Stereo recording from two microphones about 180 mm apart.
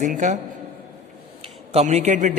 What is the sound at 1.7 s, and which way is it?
Speech, 40° right (ahead or behind).